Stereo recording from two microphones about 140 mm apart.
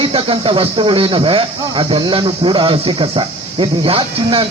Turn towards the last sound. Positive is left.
turn(degrees=-40)  # may be behind; listen again after turning